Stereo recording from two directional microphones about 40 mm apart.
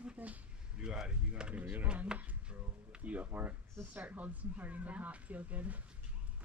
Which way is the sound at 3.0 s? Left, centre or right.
Right.